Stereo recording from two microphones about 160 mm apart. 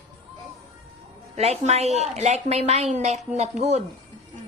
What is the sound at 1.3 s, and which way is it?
A woman's voice, 45° right (ahead or behind).